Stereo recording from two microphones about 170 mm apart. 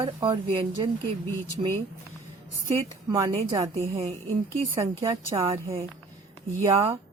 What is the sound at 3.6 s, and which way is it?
Speech, 35° right (ahead or behind).